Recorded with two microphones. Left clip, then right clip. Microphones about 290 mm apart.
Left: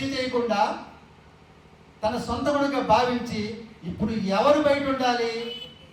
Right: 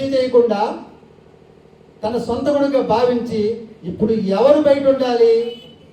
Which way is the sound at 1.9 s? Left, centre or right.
Centre.